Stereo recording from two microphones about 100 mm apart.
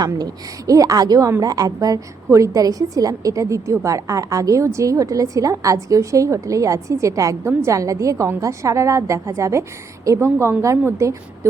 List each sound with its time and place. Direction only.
0.0 s a woman's voice: 40° right (ahead or behind)